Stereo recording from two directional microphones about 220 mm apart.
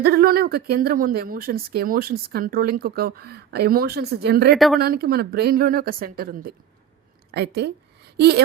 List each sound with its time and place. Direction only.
0.0 s a woman's voice: 45° right (ahead or behind)
4.5 s speech: centre (ahead or behind)
4.8 s a woman's voice: 45° right (ahead or behind)